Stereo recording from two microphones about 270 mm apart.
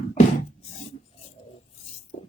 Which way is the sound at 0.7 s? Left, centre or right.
Left.